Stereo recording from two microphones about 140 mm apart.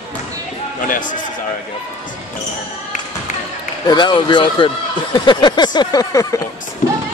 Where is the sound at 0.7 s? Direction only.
70° left (ahead or behind).